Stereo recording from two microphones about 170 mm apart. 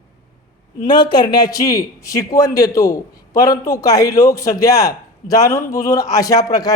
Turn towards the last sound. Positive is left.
turn(degrees=20)  # may be behind; listen again after turning